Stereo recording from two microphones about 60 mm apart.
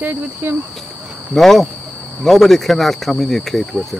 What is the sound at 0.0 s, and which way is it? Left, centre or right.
Speech, right.